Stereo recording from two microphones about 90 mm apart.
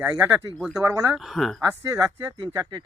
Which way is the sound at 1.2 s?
Centre (ahead or behind).